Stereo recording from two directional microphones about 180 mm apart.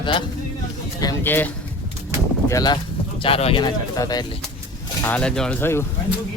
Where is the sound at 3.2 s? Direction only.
30° left (ahead or behind).